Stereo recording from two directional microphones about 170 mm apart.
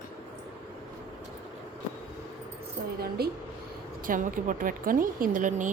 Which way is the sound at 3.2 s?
65° right (ahead or behind).